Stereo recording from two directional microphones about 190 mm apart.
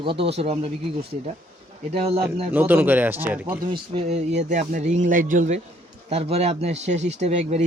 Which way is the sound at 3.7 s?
30° right (ahead or behind).